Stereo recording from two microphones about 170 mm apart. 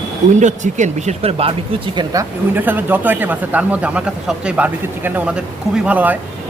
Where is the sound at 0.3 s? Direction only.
45° right (ahead or behind).